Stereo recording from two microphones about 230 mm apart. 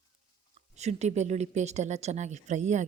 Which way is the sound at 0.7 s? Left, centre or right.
Right.